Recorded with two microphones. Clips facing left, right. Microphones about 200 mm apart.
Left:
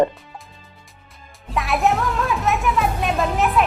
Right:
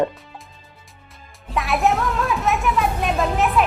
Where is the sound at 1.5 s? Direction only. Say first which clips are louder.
Even; centre (ahead or behind).